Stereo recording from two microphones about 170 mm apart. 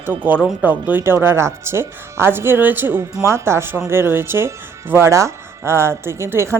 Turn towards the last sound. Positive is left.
turn(degrees=-15)  # may be behind; listen again after turning